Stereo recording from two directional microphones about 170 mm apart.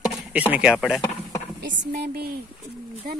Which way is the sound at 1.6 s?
90° right.